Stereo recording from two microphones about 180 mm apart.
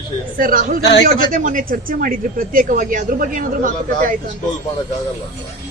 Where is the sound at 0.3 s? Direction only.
50° right (ahead or behind).